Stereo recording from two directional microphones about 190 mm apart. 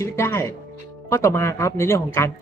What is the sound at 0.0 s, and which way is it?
Speech, 15° left (ahead or behind).